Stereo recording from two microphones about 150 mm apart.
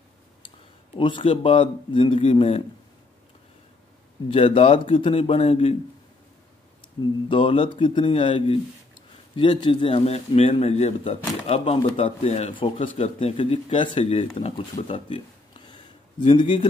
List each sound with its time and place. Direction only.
0.9 s speech: 35° left (ahead or behind)
4.3 s speech: 35° left (ahead or behind)
7.2 s a man's voice: 35° left (ahead or behind)
12.5 s speech: 35° left (ahead or behind)